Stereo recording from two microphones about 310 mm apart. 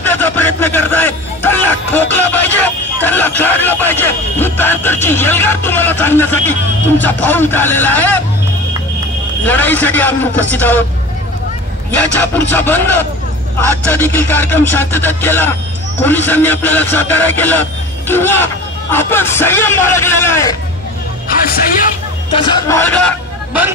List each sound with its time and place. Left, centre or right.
0.0 s music: centre
7.0 s a man's voice: centre
9.4 s a man's voice: centre
11.9 s a man's voice: centre
21.3 s music: left
22.3 s a man's voice: centre